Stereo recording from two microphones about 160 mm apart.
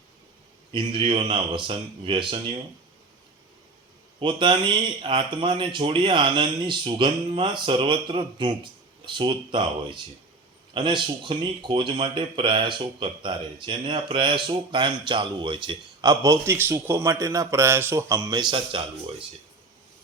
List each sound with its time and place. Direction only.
0.7 s a man's voice: 30° right (ahead or behind)
4.2 s a man's voice: 30° right (ahead or behind)